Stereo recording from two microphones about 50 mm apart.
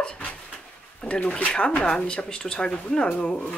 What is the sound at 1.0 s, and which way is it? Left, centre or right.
Speech, left.